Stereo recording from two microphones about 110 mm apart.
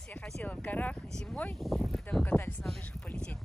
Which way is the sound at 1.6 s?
Centre (ahead or behind).